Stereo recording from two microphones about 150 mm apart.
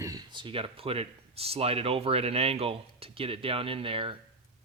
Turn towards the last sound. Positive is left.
turn(degrees=-35)  # may be behind; listen again after turning